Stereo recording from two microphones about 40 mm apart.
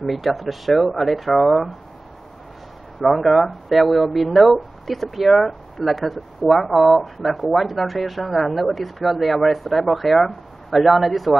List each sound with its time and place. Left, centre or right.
0.0 s speech: centre
3.0 s speech: centre